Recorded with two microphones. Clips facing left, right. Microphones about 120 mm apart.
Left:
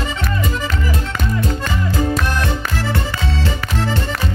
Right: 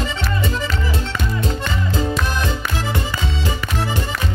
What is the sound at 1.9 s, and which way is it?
Music, 20° right (ahead or behind).